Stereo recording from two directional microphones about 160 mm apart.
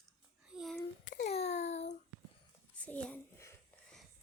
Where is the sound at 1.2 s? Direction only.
45° left (ahead or behind).